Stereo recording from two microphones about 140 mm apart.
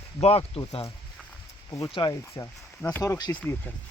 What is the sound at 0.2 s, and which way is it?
Speech, 45° left (ahead or behind).